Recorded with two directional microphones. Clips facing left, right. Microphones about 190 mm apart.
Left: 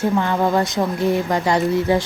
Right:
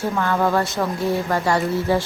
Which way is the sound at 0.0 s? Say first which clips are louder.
Left 2 dB; 15° left (ahead or behind).